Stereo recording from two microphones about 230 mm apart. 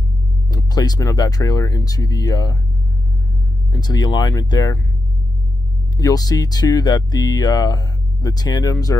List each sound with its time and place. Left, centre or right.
0.5 s speech: centre
3.7 s speech: centre
5.9 s speech: centre